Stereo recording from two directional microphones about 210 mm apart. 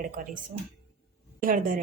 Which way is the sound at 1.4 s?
40° right (ahead or behind).